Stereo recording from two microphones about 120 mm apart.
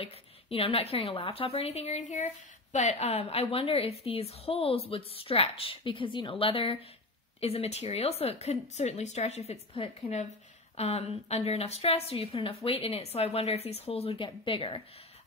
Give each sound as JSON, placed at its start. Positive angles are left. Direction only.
{"t": 0.0, "sound": "a woman's voice", "side_deg": 50}